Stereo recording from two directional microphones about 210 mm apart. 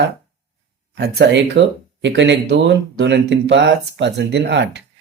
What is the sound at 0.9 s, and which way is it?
Speech, 55° right (ahead or behind).